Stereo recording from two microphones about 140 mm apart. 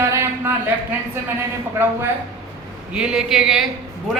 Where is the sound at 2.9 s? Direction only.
5° right (ahead or behind).